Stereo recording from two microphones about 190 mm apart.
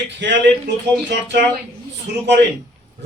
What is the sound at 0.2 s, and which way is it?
Speech, 65° right (ahead or behind).